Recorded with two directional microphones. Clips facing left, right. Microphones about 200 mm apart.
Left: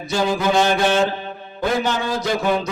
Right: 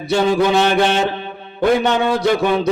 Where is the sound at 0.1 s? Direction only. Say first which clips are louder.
Right 4 dB; 65° right (ahead or behind).